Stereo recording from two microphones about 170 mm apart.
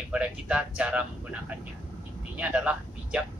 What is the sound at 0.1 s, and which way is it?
Speech, 5° right (ahead or behind).